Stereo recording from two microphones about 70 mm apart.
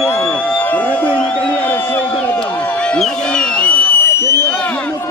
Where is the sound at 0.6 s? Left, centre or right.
Left.